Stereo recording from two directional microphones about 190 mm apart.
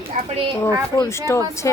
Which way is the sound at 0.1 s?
40° right (ahead or behind).